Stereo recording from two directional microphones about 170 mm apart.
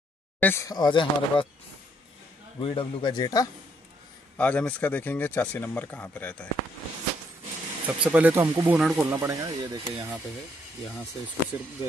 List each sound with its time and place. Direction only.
0.4 s speech: 15° left (ahead or behind)
2.6 s speech: 30° left (ahead or behind)
4.4 s speech: 10° left (ahead or behind)
7.8 s speech: 10° right (ahead or behind)
9.1 s speech: 20° right (ahead or behind)